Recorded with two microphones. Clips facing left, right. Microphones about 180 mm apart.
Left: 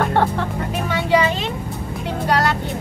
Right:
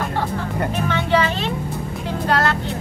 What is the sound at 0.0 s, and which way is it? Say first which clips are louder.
Music: left 5 dB; 65° left (ahead or behind).